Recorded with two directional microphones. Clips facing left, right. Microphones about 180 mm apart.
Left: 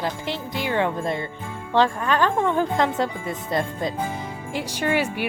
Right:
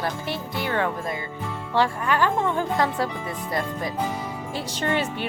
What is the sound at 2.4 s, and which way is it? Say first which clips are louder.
Speech: left 2 dB; 15° left (ahead or behind).